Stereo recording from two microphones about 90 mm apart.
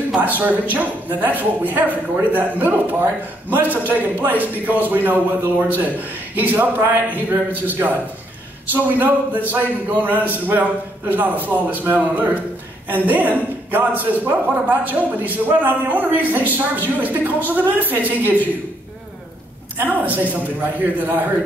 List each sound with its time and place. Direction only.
0.4 s a man's voice: 20° right (ahead or behind)
19.8 s a man's voice: 20° right (ahead or behind)